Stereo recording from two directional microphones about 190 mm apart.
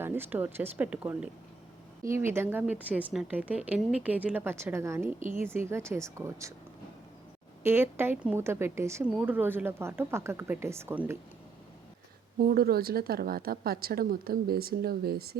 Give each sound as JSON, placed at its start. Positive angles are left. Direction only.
{"t": 0.0, "sound": "speech", "side_deg": -10}
{"t": 7.6, "sound": "speech", "side_deg": -10}
{"t": 12.4, "sound": "speech", "side_deg": -55}